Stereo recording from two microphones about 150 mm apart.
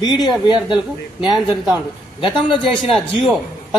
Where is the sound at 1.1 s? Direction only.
5° right (ahead or behind).